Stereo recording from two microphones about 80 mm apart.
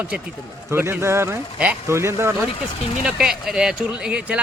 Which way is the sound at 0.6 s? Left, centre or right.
Right.